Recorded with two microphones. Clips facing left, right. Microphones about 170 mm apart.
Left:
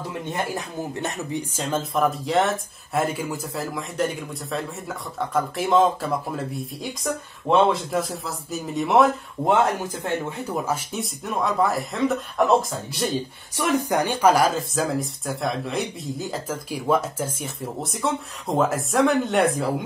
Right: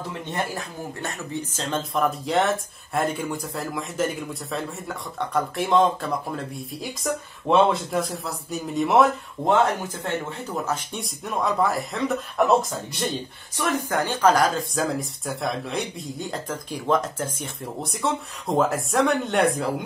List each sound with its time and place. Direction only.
0.3 s speech: 15° left (ahead or behind); by 13.1 s centre (ahead or behind)
13.6 s speech: 15° left (ahead or behind); by 19.7 s centre (ahead or behind)